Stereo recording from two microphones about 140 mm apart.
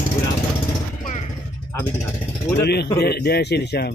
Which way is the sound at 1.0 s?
55° left (ahead or behind).